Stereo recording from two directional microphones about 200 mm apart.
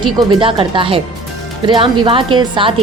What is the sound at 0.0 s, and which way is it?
A woman's voice, 25° right (ahead or behind).